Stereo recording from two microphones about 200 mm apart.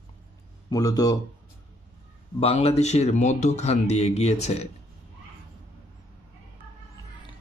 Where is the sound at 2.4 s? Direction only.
30° left (ahead or behind).